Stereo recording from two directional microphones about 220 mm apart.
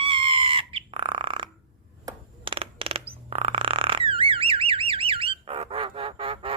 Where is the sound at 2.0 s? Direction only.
25° right (ahead or behind).